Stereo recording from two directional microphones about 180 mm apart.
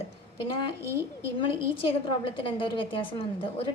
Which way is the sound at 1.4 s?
30° left (ahead or behind).